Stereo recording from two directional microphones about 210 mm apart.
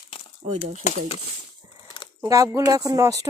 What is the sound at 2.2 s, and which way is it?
Speech, 15° right (ahead or behind).